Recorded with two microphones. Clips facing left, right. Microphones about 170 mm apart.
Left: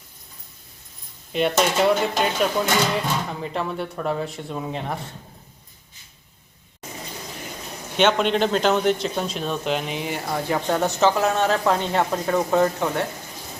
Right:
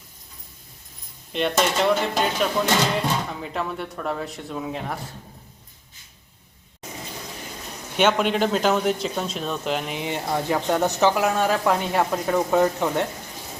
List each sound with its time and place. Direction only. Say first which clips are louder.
1.3 s speech: left 2 dB; 5° left (ahead or behind)
7.9 s speech: left 1 dB; 10° right (ahead or behind)
9.9 s speech: right 1 dB; 20° right (ahead or behind)